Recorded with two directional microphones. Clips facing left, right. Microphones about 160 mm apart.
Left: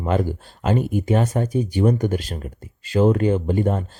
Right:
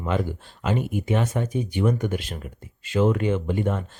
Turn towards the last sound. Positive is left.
turn(degrees=35)  # may be behind; listen again after turning